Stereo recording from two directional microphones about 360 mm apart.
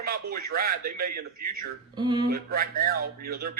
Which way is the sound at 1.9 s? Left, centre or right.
Centre.